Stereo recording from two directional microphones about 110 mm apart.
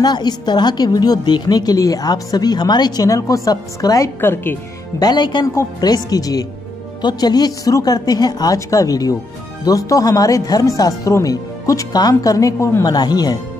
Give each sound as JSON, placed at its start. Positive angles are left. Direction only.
{"t": 0.0, "sound": "a woman's voice", "side_deg": 40}
{"t": 4.2, "sound": "speech", "side_deg": 20}
{"t": 4.9, "sound": "a woman's voice", "side_deg": 40}
{"t": 12.8, "sound": "a woman's voice", "side_deg": 40}